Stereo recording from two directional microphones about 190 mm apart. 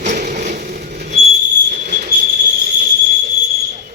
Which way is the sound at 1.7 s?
40° right (ahead or behind).